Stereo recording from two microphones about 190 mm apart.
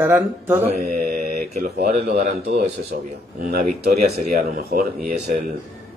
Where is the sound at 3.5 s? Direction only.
50° right (ahead or behind).